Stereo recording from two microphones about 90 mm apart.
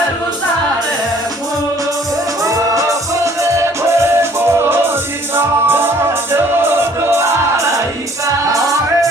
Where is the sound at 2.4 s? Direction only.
35° right (ahead or behind).